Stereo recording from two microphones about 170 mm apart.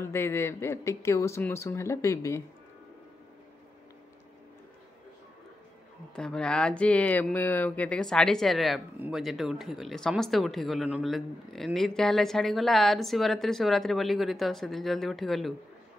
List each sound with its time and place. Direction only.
0.0 s speech: 15° left (ahead or behind)
6.1 s speech: 5° left (ahead or behind)